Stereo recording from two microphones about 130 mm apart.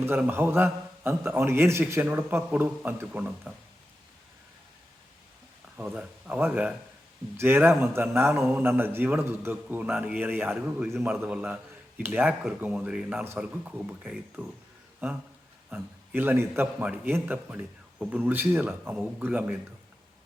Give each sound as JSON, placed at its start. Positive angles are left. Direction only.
{"t": 0.0, "sound": "a man's voice", "side_deg": -15}
{"t": 5.7, "sound": "a man's voice", "side_deg": -10}
{"t": 15.7, "sound": "a man's voice", "side_deg": -15}